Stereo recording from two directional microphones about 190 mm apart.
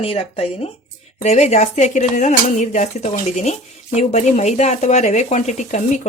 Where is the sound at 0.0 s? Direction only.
30° left (ahead or behind).